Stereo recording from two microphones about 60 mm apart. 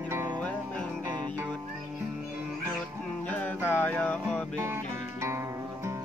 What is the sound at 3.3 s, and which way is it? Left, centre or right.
Music, left.